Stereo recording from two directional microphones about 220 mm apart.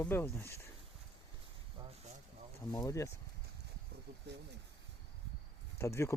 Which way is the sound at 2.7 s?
15° left (ahead or behind).